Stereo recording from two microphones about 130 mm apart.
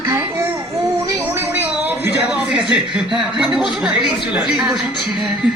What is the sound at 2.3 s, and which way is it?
Speech, 5° right (ahead or behind).